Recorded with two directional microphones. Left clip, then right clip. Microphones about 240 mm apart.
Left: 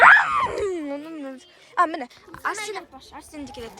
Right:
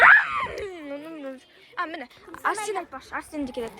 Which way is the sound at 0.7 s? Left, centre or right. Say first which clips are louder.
Left 7 dB; left.